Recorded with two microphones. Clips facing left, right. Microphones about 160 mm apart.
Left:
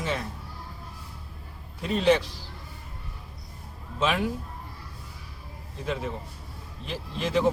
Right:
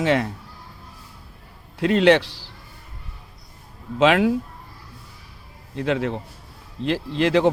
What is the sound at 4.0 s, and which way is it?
Speech, 90° right.